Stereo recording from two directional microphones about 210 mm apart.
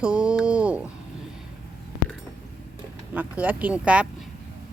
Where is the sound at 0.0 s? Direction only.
5° right (ahead or behind).